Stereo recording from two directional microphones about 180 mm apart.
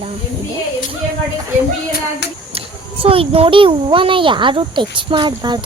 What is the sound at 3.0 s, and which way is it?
A child's voice, 30° right (ahead or behind).